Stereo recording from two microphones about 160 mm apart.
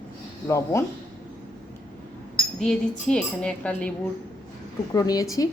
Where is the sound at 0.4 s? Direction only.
20° left (ahead or behind).